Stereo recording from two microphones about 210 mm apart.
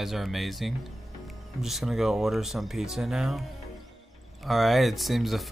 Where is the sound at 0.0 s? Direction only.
Centre (ahead or behind).